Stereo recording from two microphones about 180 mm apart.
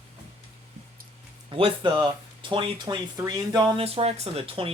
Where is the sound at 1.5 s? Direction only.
30° right (ahead or behind).